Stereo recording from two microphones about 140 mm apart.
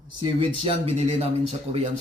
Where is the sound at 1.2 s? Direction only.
45° right (ahead or behind).